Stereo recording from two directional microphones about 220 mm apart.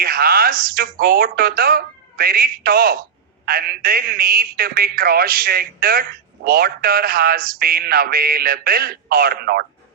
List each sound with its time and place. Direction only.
0.0 s a man's voice: 40° right (ahead or behind)